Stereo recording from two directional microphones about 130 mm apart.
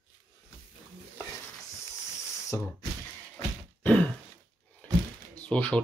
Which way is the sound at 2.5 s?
20° left (ahead or behind).